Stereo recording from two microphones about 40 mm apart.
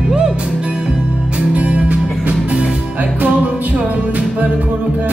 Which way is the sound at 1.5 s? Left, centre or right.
Right.